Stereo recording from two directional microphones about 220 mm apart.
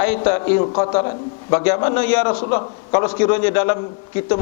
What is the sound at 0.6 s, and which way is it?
Speech, 25° left (ahead or behind).